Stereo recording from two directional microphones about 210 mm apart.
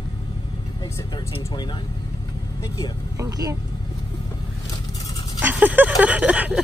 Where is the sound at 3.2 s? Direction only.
15° right (ahead or behind).